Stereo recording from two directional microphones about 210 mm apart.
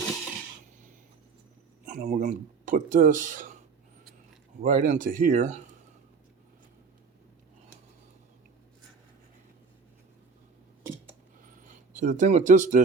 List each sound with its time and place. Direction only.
1.8 s speech: 35° right (ahead or behind)
4.6 s speech: 40° right (ahead or behind)
11.9 s speech: 35° right (ahead or behind)